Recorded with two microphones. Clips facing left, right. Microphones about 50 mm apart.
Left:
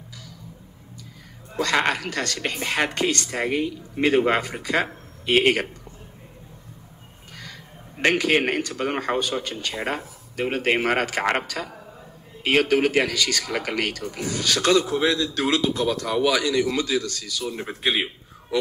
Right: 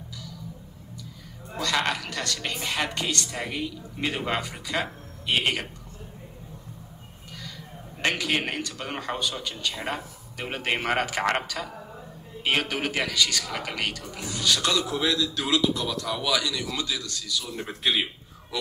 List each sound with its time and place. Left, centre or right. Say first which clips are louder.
1.6 s a woman's voice: left 4 dB; left
8.0 s a woman's voice: left 6 dB; left
9.8 s a woman's voice: left 4 dB; left
10.9 s a man's voice: left 3 dB; left
12.5 s a man's voice: left 10 dB; left
14.7 s a woman's voice: left 6 dB; left
15.2 s a woman's voice: left 2 dB; left
17.6 s a man's voice: left 2 dB; centre